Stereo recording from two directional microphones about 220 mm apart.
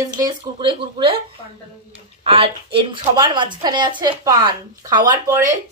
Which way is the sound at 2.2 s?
25° right (ahead or behind).